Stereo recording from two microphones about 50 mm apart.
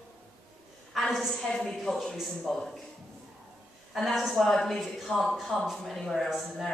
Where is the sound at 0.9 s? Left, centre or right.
Centre.